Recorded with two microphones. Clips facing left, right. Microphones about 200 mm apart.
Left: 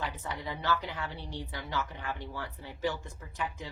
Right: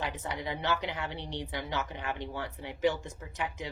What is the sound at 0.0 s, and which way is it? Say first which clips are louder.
Speech: right 2 dB; 20° right (ahead or behind).